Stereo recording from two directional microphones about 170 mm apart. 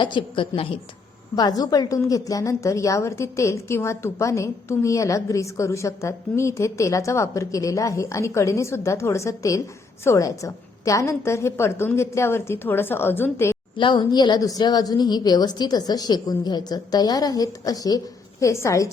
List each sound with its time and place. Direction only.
0.0 s a woman's voice: 30° left (ahead or behind)
13.7 s a woman's voice: 30° left (ahead or behind)